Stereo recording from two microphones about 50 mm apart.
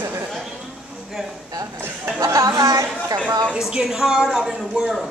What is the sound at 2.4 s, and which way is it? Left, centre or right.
Chatter, right.